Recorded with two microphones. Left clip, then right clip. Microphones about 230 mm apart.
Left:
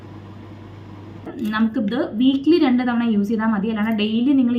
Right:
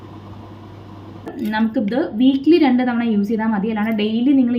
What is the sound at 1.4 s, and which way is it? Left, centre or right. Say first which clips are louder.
A woman's voice: right 2 dB; centre.